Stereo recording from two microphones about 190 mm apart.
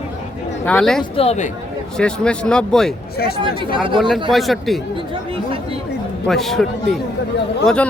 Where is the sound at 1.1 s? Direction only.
30° left (ahead or behind).